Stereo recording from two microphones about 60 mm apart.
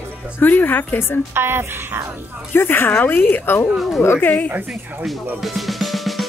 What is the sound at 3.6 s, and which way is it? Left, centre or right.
Speech, centre.